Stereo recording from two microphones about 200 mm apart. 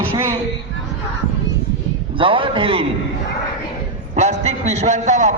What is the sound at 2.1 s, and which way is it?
Speech, 25° right (ahead or behind).